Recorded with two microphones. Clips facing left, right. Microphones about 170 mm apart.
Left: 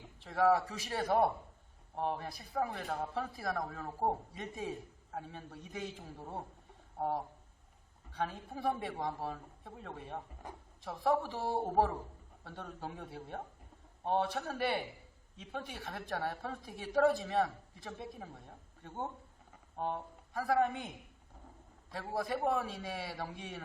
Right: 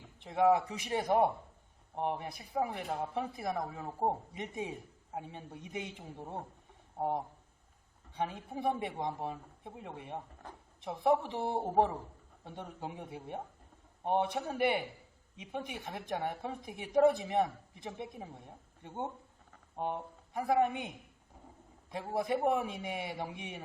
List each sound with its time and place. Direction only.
0.2 s a man's voice: 20° right (ahead or behind)
10.4 s speech: 10° left (ahead or behind)
10.8 s a woman's voice: 20° right (ahead or behind)